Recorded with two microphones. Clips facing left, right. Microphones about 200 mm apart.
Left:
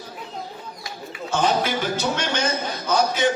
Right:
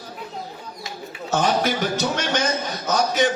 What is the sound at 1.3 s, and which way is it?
Music, 45° right (ahead or behind).